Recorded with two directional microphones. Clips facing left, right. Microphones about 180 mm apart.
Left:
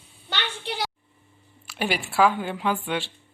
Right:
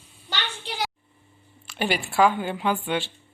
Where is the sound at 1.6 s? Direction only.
Centre (ahead or behind).